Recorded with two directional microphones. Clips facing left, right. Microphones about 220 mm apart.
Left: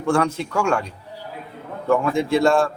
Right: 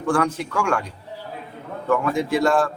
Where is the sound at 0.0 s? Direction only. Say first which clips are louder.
Left 1 dB; 25° left (ahead or behind).